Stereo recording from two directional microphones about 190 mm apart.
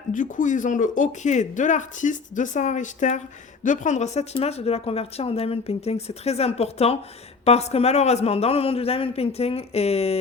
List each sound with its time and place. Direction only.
0.1 s speech: 45° left (ahead or behind)